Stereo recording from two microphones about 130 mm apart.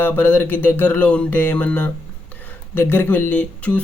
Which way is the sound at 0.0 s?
15° left (ahead or behind).